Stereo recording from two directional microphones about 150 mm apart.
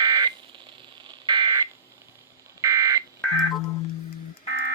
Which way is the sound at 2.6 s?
20° right (ahead or behind).